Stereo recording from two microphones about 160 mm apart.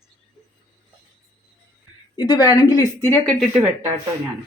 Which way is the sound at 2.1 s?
25° left (ahead or behind).